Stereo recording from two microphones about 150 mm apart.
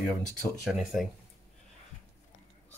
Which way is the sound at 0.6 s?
5° right (ahead or behind).